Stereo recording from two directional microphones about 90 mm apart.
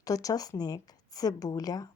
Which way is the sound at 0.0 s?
40° left (ahead or behind).